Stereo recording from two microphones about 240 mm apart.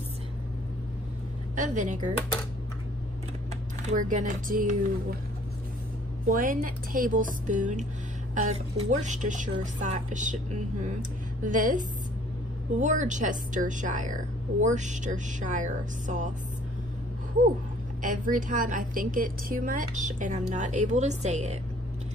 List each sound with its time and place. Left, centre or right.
1.5 s speech: right
3.9 s speech: right
6.2 s speech: right
18.0 s speech: right